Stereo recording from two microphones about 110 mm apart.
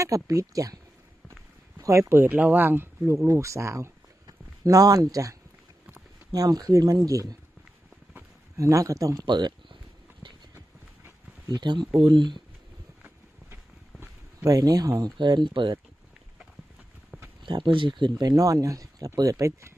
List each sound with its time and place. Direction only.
0.0 s speech: 30° right (ahead or behind)
1.8 s speech: 25° right (ahead or behind)
8.5 s speech: 30° right (ahead or behind)
9.2 s speech: 45° right (ahead or behind)
11.4 s speech: 40° right (ahead or behind)
14.4 s speech: 35° right (ahead or behind)
17.4 s speech: 45° right (ahead or behind); by 19.7 s 30° right (ahead or behind)